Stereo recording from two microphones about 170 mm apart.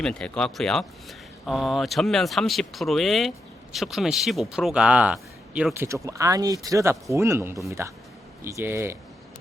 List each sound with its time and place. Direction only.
0.0 s speech: 5° left (ahead or behind)
5.7 s speech: 15° right (ahead or behind)